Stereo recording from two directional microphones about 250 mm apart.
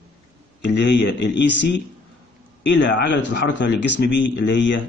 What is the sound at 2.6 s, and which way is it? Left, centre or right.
A man's voice, left.